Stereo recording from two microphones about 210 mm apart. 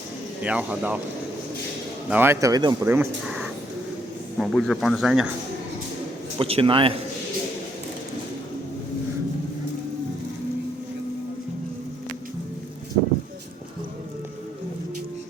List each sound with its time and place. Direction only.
0.4 s speech: 5° right (ahead or behind)
2.0 s speech: 10° right (ahead or behind)
6.4 s a man's voice: 25° right (ahead or behind)